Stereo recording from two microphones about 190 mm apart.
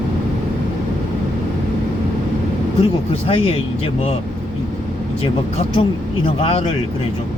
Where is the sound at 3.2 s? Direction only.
30° left (ahead or behind).